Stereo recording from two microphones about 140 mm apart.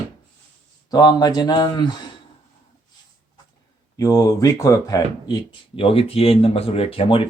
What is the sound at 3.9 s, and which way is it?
Speech, 25° left (ahead or behind).